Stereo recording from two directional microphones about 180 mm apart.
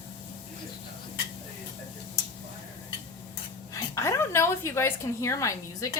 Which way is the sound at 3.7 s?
15° left (ahead or behind).